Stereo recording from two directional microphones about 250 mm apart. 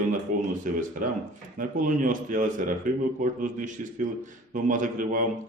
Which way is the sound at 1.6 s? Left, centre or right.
Right.